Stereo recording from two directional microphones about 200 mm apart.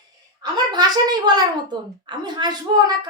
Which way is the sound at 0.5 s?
20° right (ahead or behind).